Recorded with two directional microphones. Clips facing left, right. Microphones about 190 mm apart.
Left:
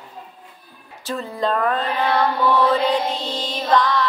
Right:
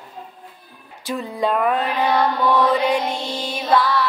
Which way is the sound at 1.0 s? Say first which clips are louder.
Right 1 dB; 15° right (ahead or behind).